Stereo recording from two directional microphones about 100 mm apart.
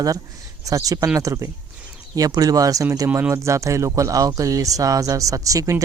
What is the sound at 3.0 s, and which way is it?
Speech, 20° right (ahead or behind).